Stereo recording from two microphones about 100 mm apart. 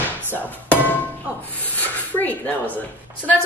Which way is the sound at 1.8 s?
15° left (ahead or behind).